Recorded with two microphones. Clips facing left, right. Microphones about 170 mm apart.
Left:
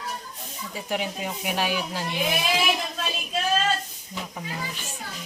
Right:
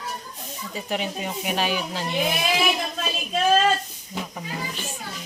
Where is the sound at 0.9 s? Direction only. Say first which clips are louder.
Right 1 dB; 5° left (ahead or behind).